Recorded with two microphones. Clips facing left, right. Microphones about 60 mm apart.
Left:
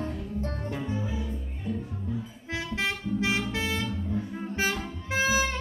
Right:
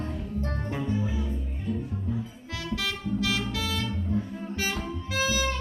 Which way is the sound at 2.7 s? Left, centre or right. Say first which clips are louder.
Even; left.